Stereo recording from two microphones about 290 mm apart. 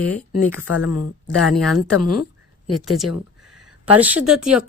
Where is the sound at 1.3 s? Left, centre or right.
Centre.